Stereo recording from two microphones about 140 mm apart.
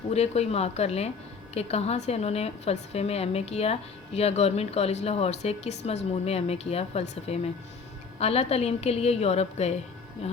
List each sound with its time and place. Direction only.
0.1 s a woman's voice: 50° left (ahead or behind)